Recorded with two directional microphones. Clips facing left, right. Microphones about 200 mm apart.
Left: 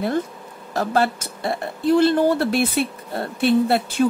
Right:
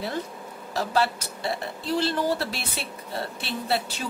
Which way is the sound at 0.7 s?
50° left (ahead or behind).